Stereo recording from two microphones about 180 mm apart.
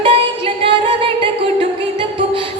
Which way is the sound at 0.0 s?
30° right (ahead or behind).